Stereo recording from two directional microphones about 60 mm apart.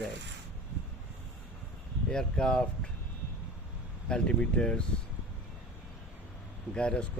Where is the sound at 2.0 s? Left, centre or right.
Centre.